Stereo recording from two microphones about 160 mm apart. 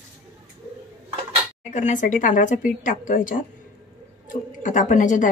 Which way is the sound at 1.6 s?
50° left (ahead or behind).